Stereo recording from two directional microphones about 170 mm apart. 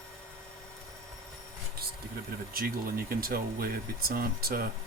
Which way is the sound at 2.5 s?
60° right (ahead or behind).